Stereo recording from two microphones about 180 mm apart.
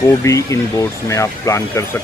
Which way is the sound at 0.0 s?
15° left (ahead or behind).